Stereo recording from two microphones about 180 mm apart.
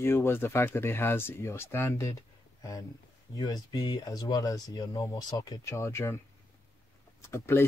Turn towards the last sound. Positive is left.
turn(degrees=15)  # may be behind; listen again after turning